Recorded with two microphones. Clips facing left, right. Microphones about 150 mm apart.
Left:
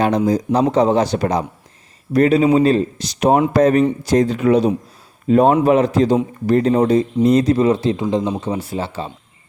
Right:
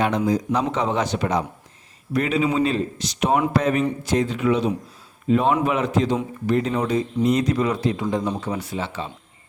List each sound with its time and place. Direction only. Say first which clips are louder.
0.3 s speech: left 5 dB; 35° left (ahead or behind)